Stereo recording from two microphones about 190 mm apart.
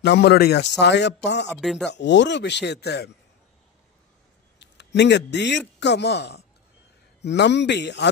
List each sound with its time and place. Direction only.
0.0 s speech: 60° left (ahead or behind)
1.6 s speech: centre (ahead or behind)
1.9 s speech: 65° left (ahead or behind)
4.6 s a man's voice: 65° left (ahead or behind)